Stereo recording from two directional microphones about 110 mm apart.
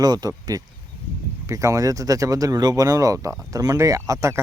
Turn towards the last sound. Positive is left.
turn(degrees=-25)  # may be behind; listen again after turning